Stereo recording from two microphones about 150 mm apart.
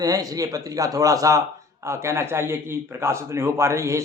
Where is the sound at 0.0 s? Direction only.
25° right (ahead or behind).